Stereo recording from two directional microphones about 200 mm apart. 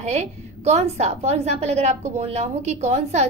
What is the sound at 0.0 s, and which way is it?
A woman's voice, 35° right (ahead or behind).